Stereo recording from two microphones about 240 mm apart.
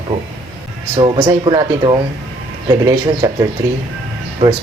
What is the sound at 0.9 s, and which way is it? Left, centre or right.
Speech, centre.